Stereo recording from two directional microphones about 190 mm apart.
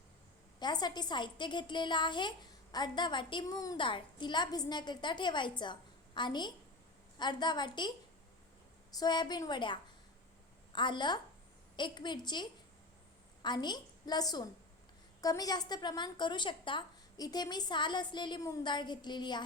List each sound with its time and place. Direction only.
0.6 s a woman's voice: 20° left (ahead or behind)